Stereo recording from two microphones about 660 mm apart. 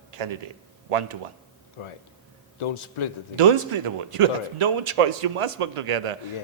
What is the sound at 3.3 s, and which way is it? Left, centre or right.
A man's voice, right.